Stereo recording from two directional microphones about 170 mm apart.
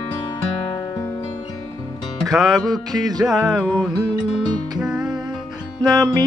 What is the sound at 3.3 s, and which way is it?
Music, centre (ahead or behind).